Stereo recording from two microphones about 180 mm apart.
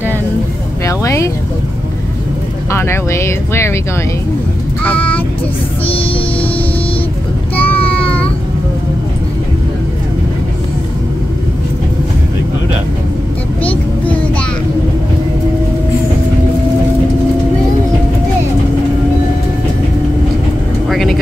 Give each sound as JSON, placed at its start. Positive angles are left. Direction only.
{"t": 0.8, "sound": "speech", "side_deg": 15}
{"t": 2.7, "sound": "speech", "side_deg": 15}
{"t": 4.8, "sound": "child singing", "side_deg": 10}
{"t": 7.5, "sound": "a sound", "side_deg": 10}
{"t": 20.9, "sound": "vehicle", "side_deg": 0}